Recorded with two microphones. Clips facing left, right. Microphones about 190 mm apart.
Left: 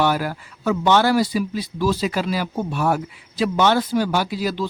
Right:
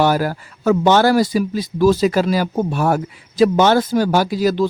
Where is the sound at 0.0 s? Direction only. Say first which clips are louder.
Right 4 dB; 40° right (ahead or behind).